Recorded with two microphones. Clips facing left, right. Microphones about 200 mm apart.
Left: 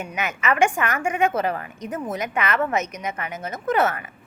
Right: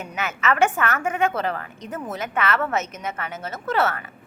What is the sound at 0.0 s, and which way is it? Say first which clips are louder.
A woman's voice: even; 15° left (ahead or behind).